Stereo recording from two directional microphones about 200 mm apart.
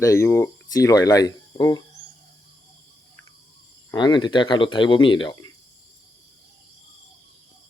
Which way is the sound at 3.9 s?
20° left (ahead or behind).